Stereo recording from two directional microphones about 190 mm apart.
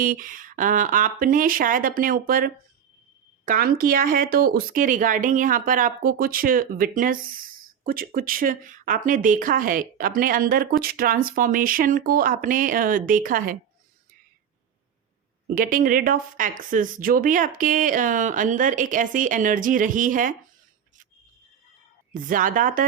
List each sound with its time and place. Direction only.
0.0 s speech: 45° right (ahead or behind)
15.5 s speech: 45° right (ahead or behind)
22.1 s speech: 45° right (ahead or behind)